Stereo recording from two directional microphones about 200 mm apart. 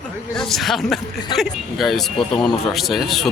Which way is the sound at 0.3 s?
Centre (ahead or behind).